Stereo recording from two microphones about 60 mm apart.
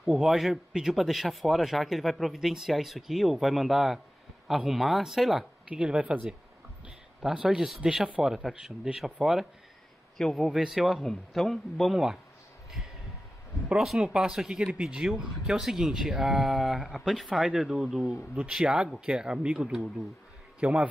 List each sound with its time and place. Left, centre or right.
0.0 s a man's voice: centre
0.3 s a man's voice: centre
5.7 s speech: centre
7.2 s a man's voice: centre
10.5 s a man's voice: centre
13.9 s speech: centre
18.3 s speech: centre
20.6 s speech: right